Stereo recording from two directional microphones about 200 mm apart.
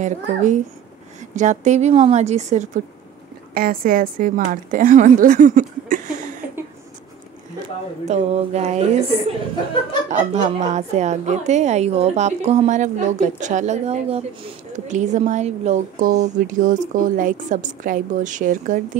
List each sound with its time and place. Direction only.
0.0 s a woman's voice: 35° right (ahead or behind)
3.5 s a woman's voice: 45° right (ahead or behind)
8.1 s a woman's voice: 35° right (ahead or behind)
10.0 s a woman's voice: 35° right (ahead or behind)